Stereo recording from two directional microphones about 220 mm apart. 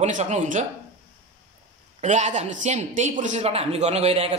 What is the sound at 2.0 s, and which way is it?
A man's voice, 35° right (ahead or behind).